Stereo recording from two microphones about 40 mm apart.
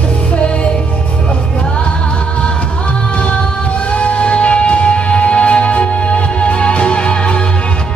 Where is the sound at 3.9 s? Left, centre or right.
Left.